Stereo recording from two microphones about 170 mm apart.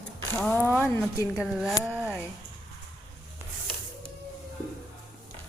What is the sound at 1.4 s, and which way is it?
Speech, 5° right (ahead or behind).